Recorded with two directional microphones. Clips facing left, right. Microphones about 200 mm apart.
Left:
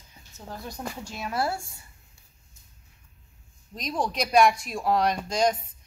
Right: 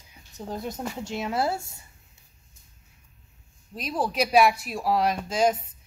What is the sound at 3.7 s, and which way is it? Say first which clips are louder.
Speech: right 2 dB; 5° right (ahead or behind).